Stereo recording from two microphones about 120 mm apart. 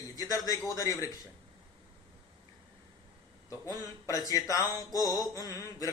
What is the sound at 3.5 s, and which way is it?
A man's voice, 30° left (ahead or behind).